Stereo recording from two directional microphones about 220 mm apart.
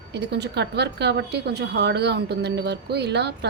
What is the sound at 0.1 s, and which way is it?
A woman's voice, 50° right (ahead or behind).